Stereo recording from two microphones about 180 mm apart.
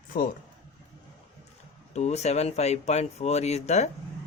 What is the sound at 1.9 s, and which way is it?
Speech, 40° left (ahead or behind).